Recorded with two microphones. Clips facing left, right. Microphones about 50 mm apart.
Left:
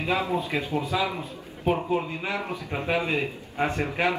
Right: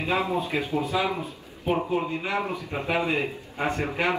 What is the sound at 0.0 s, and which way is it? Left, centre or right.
A man's voice, right.